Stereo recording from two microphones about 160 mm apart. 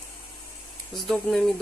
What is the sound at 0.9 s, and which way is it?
Speech, centre (ahead or behind).